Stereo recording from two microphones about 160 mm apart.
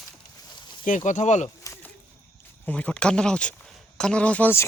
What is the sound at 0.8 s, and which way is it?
Speech, 50° left (ahead or behind).